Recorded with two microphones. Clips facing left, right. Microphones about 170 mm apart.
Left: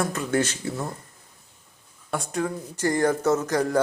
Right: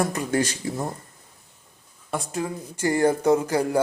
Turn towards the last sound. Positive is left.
turn(degrees=-10)  # may be behind; listen again after turning